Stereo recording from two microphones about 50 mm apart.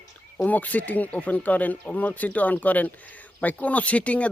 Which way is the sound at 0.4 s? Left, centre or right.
Left.